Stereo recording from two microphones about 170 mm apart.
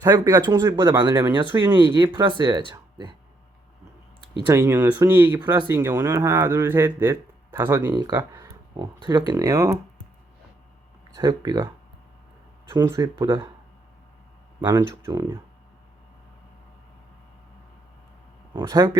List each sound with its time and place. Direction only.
0.0 s speech: 20° right (ahead or behind)
4.4 s speech: 15° right (ahead or behind)
11.1 s speech: 20° right (ahead or behind)
12.7 s speech: 20° right (ahead or behind)
14.6 s speech: 15° right (ahead or behind)
18.5 s speech: 20° right (ahead or behind)